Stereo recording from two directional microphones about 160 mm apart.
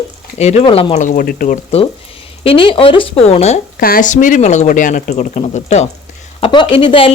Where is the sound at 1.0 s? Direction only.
60° left (ahead or behind).